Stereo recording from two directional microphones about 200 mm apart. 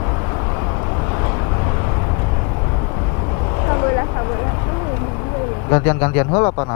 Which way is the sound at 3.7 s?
25° left (ahead or behind).